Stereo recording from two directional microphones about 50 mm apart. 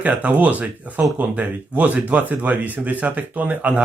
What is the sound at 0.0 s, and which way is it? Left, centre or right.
Speech, right.